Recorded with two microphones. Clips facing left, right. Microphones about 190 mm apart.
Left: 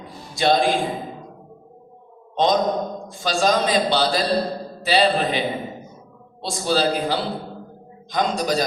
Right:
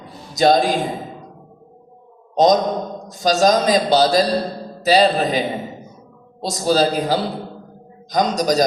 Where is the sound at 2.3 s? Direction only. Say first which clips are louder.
Right 4 dB; 40° right (ahead or behind).